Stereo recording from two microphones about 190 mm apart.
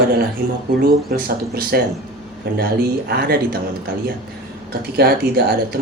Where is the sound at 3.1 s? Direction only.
55° right (ahead or behind).